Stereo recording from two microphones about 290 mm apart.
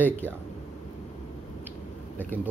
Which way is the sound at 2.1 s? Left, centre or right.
Centre.